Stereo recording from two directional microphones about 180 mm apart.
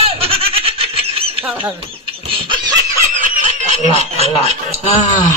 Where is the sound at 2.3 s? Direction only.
25° right (ahead or behind).